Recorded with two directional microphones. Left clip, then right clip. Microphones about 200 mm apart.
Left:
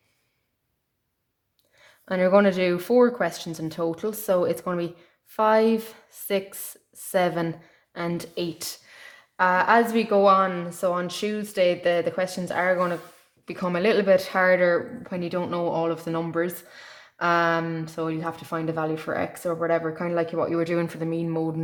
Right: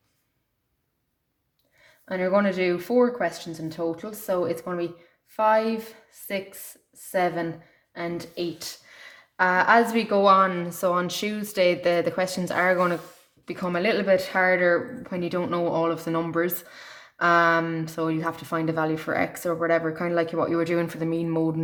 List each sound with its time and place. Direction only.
2.0 s speech: 35° left (ahead or behind)
8.9 s speech: 10° left (ahead or behind)
13.4 s speech: 15° left (ahead or behind)
15.0 s speech: 5° left (ahead or behind)